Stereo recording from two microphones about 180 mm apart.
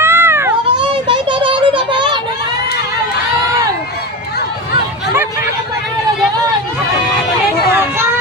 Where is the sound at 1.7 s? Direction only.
25° right (ahead or behind).